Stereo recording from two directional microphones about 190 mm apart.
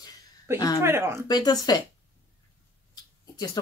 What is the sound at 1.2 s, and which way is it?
Speech, 20° left (ahead or behind).